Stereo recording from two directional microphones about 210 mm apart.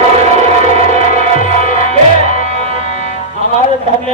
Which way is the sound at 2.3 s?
35° left (ahead or behind).